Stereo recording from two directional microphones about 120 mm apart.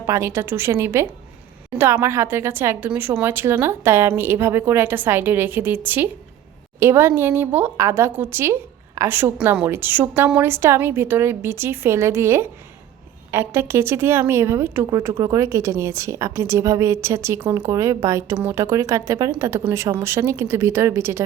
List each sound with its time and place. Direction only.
0.0 s a woman's voice: 20° right (ahead or behind)